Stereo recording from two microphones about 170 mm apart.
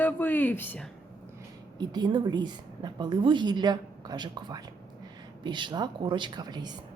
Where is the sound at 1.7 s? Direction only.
25° right (ahead or behind).